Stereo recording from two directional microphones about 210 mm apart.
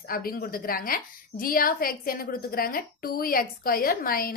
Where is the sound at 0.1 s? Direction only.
45° left (ahead or behind).